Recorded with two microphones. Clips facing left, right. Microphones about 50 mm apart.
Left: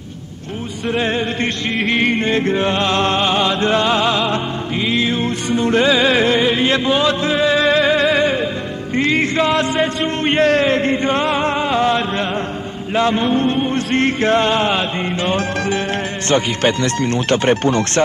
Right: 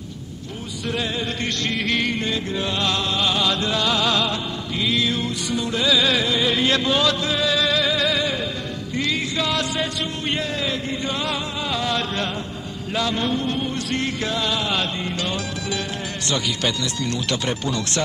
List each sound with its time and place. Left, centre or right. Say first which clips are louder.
1.0 s music: left 7 dB; left
10.4 s music: left 12 dB; left
14.8 s music: left 5 dB; left